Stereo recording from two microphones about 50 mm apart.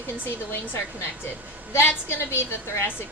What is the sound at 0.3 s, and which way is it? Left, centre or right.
Speech, left.